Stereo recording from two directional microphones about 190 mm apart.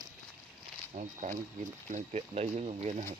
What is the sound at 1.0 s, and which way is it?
Speech, 40° right (ahead or behind).